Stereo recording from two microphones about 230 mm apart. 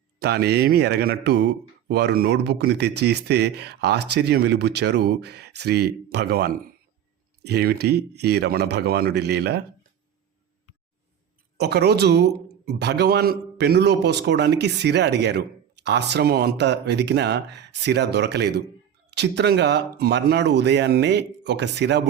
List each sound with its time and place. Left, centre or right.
0.2 s speech: right
11.5 s speech: right